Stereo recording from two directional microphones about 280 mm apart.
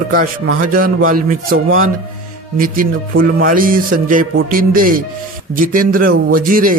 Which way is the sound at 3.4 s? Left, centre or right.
Right.